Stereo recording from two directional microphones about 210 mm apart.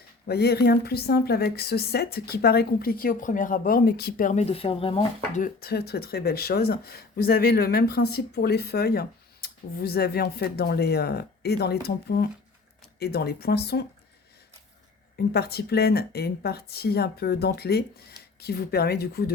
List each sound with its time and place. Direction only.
0.3 s a woman's voice: 50° left (ahead or behind)
15.1 s a woman's voice: 50° left (ahead or behind)